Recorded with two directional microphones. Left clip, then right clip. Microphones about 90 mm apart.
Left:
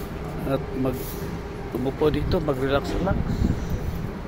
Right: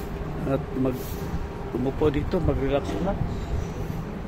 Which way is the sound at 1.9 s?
25° right (ahead or behind).